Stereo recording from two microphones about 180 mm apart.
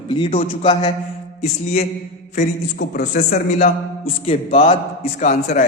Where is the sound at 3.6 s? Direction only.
40° left (ahead or behind).